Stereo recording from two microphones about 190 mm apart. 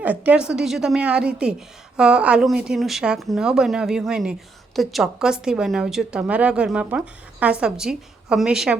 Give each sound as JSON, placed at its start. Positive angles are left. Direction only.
{"t": 0.0, "sound": "a woman's voice", "side_deg": -10}